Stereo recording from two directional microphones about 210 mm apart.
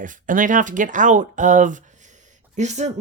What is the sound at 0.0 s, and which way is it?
Speech, 40° right (ahead or behind).